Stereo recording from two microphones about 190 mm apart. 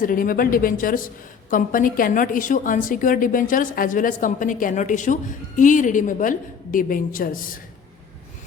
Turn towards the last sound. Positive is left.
turn(degrees=45)  # may be behind; listen again after turning